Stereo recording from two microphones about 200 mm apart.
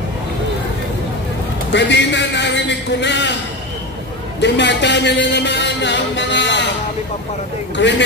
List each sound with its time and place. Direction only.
1.7 s a man's voice: 60° left (ahead or behind)
4.4 s a man's voice: 60° left (ahead or behind)
7.7 s a man's voice: 60° left (ahead or behind)